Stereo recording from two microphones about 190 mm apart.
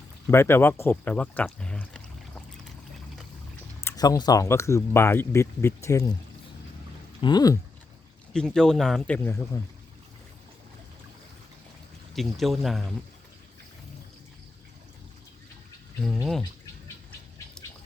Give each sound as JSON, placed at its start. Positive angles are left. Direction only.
{"t": 0.3, "sound": "speech", "side_deg": 10}
{"t": 3.8, "sound": "speech", "side_deg": 15}
{"t": 7.2, "sound": "speech", "side_deg": 20}
{"t": 8.3, "sound": "speech", "side_deg": 5}
{"t": 12.1, "sound": "speech", "side_deg": 0}
{"t": 16.1, "sound": "speech", "side_deg": 0}